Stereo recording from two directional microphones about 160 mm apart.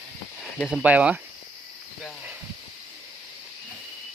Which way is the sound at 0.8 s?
10° right (ahead or behind).